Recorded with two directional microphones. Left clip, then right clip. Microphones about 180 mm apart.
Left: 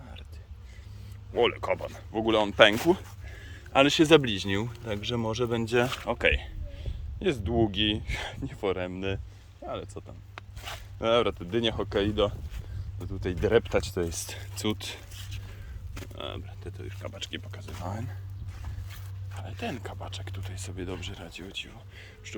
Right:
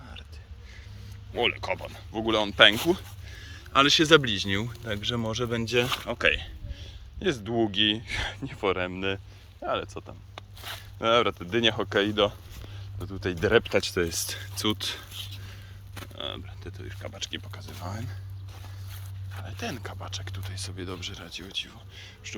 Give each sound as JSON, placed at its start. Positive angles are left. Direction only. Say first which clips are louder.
{"t": 0.0, "sound": "a sound", "louder": "right 3 dB", "side_deg": 10}
{"t": 1.3, "sound": "speech", "louder": "left 1 dB", "side_deg": 20}
{"t": 16.1, "sound": "speech", "louder": "right 3 dB", "side_deg": 10}
{"t": 19.3, "sound": "speech", "louder": "even", "side_deg": 10}